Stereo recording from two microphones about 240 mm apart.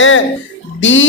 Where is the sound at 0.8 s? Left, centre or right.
Left.